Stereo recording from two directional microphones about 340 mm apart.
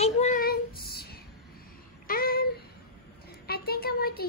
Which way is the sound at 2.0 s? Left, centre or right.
Left.